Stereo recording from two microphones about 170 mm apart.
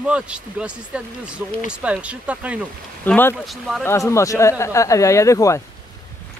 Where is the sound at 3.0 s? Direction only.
10° left (ahead or behind).